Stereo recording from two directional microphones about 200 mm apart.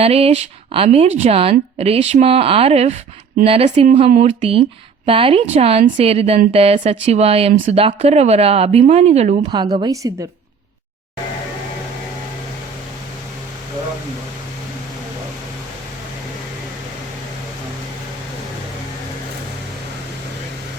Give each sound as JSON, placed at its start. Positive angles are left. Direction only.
{"t": 0.0, "sound": "speech", "side_deg": -30}
{"t": 9.5, "sound": "speech", "side_deg": -20}